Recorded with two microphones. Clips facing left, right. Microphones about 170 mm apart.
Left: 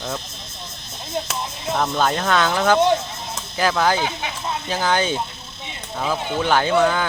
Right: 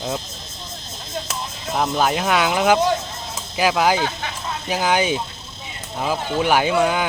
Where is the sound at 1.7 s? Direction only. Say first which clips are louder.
Right 1 dB; 10° right (ahead or behind).